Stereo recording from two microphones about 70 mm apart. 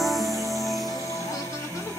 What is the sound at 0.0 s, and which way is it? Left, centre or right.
Music, centre.